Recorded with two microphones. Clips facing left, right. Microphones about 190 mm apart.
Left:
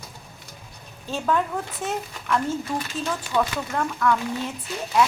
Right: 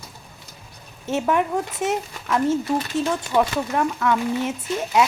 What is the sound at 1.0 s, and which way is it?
Speech, 20° right (ahead or behind).